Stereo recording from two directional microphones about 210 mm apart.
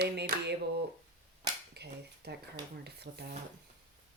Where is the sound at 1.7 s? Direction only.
50° right (ahead or behind).